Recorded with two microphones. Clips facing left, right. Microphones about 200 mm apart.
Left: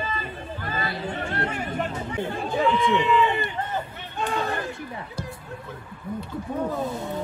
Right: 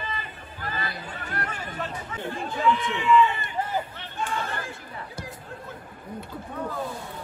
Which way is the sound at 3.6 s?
10° right (ahead or behind).